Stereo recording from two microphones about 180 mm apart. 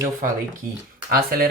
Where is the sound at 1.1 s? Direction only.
55° right (ahead or behind).